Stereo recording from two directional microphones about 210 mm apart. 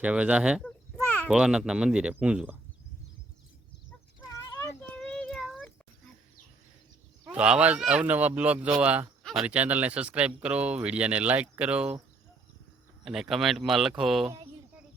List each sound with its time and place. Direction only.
0.0 s speech: 5° right (ahead or behind)
4.4 s a sound: 15° left (ahead or behind)
4.8 s child singing: 10° left (ahead or behind)
7.3 s speech: 5° right (ahead or behind)
13.1 s speech: centre (ahead or behind)